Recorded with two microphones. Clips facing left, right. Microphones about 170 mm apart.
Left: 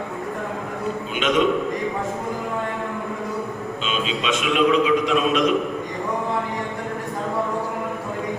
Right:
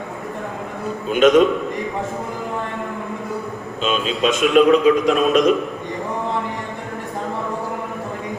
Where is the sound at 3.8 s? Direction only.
45° right (ahead or behind).